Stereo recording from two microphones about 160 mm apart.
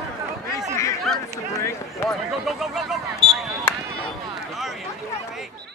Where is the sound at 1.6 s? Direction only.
15° left (ahead or behind).